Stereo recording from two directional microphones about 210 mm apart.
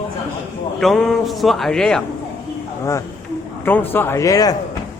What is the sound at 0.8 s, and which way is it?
Speech, centre (ahead or behind).